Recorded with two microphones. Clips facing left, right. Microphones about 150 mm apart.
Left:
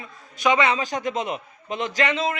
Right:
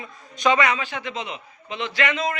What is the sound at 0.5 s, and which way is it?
Speech, 30° left (ahead or behind).